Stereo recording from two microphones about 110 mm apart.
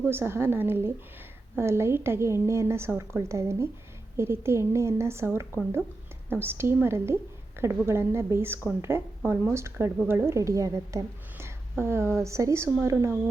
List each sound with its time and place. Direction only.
0.0 s a woman's voice: 20° right (ahead or behind)